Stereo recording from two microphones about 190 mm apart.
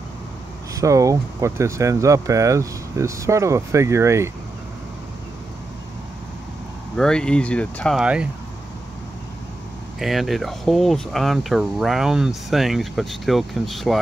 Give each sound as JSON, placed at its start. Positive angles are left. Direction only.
{"t": 0.7, "sound": "speech", "side_deg": -15}
{"t": 7.0, "sound": "speech", "side_deg": 5}
{"t": 9.9, "sound": "speech", "side_deg": 0}